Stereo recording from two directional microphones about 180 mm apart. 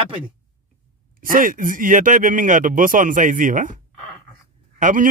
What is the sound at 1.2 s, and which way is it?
Speech, 50° right (ahead or behind).